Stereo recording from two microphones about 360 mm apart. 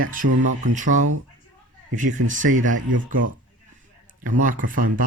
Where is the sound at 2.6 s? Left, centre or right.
Right.